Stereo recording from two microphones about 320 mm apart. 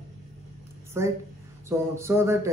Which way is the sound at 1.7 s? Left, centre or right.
Centre.